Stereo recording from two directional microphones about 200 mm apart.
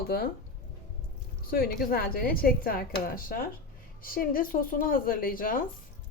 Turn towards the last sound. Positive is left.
turn(degrees=45)  # may be behind; listen again after turning